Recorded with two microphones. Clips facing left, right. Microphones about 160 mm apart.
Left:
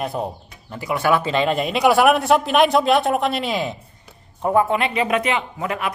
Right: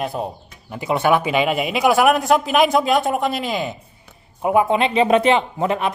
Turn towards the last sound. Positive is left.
turn(degrees=-25)  # may be behind; listen again after turning